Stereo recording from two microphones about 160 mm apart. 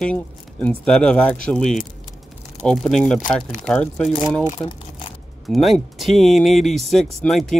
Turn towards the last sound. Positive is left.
turn(degrees=0)  # may be behind; listen again after turning